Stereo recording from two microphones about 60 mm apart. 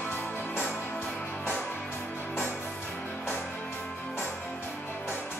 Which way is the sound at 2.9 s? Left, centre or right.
Centre.